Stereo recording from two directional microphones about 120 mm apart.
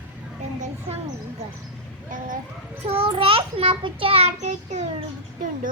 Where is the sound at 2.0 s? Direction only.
90° right.